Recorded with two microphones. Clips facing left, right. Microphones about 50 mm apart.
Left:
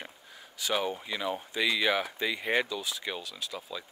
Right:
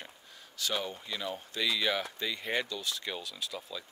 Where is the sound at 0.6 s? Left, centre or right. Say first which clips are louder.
Left 4 dB; centre.